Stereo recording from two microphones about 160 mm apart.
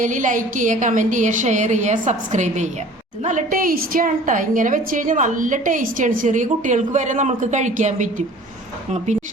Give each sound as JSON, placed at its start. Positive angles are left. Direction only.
{"t": 0.0, "sound": "a woman's voice", "side_deg": -55}